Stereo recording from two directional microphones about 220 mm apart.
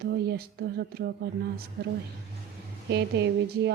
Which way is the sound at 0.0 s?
45° right (ahead or behind).